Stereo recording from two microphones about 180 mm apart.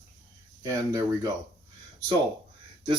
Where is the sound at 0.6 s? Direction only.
20° right (ahead or behind).